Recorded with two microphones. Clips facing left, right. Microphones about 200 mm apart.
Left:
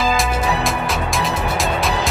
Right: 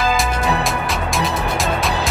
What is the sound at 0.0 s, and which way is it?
Music, centre (ahead or behind).